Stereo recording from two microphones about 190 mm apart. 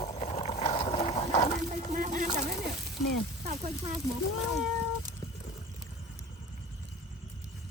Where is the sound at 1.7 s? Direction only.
40° right (ahead or behind).